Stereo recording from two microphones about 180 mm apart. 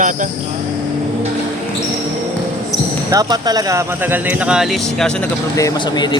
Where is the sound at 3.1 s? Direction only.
20° right (ahead or behind); by 5.1 s centre (ahead or behind).